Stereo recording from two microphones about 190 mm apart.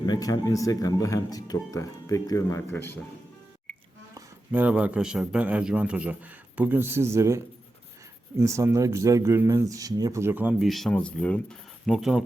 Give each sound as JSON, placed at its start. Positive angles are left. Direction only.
{"t": 0.0, "sound": "speech", "side_deg": 20}
{"t": 4.1, "sound": "speech", "side_deg": -10}